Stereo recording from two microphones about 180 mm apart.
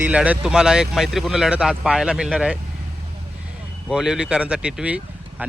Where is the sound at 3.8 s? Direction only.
5° right (ahead or behind).